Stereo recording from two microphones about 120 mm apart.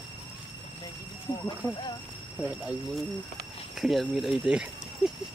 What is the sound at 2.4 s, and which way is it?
Speech, 10° right (ahead or behind).